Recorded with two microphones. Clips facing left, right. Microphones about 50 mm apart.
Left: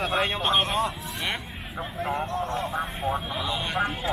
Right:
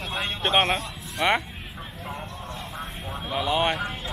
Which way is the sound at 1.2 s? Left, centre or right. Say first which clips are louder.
Right 9 dB; right.